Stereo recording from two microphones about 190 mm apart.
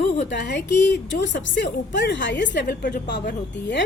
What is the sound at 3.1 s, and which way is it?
Speech, 65° left (ahead or behind).